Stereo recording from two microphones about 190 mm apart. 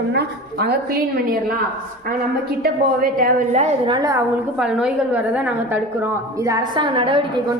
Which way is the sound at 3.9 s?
20° right (ahead or behind).